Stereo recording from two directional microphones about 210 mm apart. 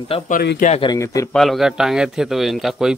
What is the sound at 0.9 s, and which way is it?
Speech, 15° left (ahead or behind).